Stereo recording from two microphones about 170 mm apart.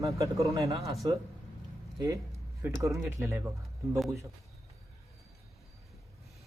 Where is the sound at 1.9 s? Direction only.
20° right (ahead or behind).